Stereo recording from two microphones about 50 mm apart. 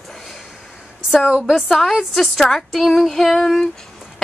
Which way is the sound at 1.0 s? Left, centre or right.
Centre.